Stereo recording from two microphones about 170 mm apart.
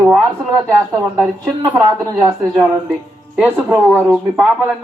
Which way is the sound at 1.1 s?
15° right (ahead or behind).